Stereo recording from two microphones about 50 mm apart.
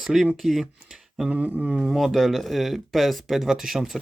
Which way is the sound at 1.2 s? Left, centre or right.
Right.